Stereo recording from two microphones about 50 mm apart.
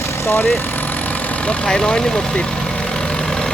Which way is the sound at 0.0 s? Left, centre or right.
Left.